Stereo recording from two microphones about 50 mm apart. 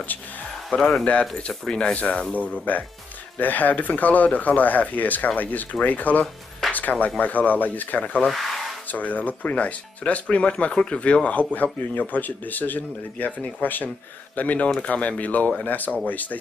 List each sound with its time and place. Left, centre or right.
0.7 s speech: centre
1.8 s speech: left
2.7 s speech: left
8.3 s a sound: centre
8.9 s speech: left